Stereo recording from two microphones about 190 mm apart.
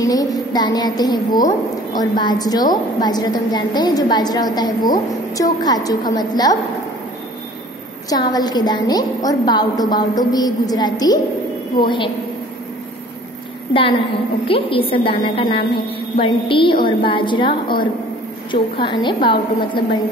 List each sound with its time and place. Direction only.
0.0 s a woman's voice: 20° left (ahead or behind)
8.1 s a woman's voice: 20° left (ahead or behind)
14.5 s a woman's voice: 30° left (ahead or behind)